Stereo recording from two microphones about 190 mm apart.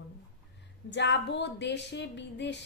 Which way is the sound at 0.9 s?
65° left (ahead or behind).